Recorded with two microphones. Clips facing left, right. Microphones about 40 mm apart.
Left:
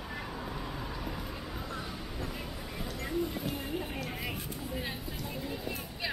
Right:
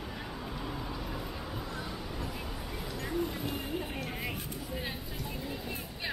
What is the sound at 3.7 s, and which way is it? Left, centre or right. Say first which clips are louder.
Vehicle: even; centre.